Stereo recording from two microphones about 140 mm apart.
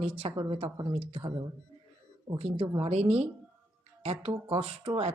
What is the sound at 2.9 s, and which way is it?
A woman's voice, 50° right (ahead or behind).